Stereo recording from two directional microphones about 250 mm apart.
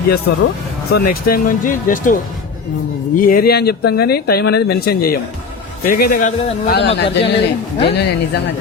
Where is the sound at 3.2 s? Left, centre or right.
Left.